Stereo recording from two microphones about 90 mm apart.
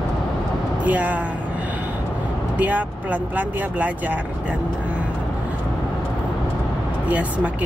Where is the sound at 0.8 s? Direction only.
15° right (ahead or behind).